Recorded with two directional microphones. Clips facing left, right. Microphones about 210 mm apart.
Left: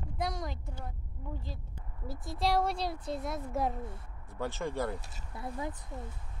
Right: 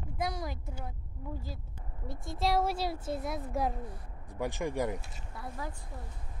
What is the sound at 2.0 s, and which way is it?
Speech, centre (ahead or behind).